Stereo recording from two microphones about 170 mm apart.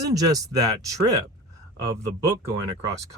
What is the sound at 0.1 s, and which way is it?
Speech, 20° right (ahead or behind).